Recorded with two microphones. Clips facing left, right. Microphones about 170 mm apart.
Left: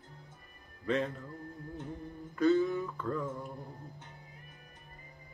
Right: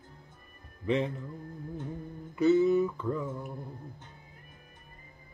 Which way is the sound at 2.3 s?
10° right (ahead or behind).